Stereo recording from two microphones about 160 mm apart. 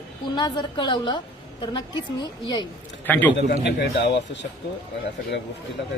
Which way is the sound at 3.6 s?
90° left.